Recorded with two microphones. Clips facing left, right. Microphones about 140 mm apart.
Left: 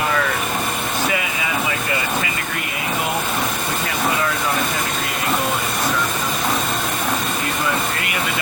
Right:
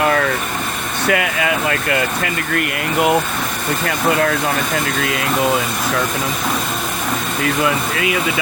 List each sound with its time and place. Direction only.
1.0 s speech: 65° right (ahead or behind)
7.4 s speech: 85° right